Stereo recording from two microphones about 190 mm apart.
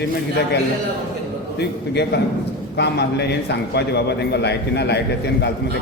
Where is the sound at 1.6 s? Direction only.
60° left (ahead or behind).